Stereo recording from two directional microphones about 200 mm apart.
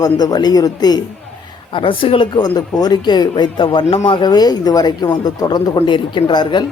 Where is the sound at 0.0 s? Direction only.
20° left (ahead or behind).